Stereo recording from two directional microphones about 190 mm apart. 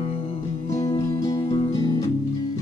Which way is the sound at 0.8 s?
20° left (ahead or behind).